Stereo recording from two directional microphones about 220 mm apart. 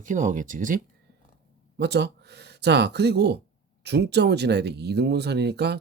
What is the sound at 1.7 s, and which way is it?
Speech, 50° right (ahead or behind).